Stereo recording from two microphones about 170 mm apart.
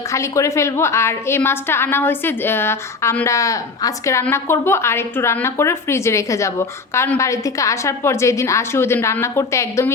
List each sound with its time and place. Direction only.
0.1 s a woman's voice: 15° left (ahead or behind)